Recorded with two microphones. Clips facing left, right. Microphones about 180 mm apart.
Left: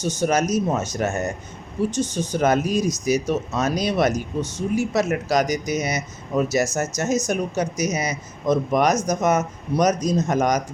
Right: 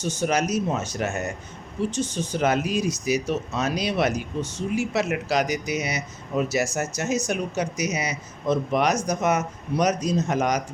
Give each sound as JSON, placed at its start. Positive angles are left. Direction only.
{"t": 0.2, "sound": "speech", "side_deg": 45}